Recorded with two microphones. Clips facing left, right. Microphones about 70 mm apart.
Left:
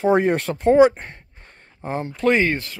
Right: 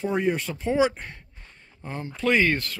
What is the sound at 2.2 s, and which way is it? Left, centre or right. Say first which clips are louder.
Speech: left 3 dB; left.